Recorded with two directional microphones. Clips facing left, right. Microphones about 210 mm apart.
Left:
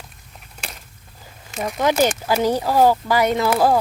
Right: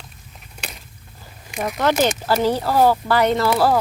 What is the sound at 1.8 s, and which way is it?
Speech, 10° left (ahead or behind).